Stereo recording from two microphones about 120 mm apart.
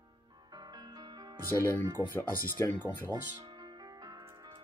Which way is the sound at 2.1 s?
15° left (ahead or behind).